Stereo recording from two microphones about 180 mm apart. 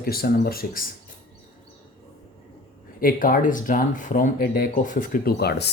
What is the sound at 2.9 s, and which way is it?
Speech, 50° left (ahead or behind).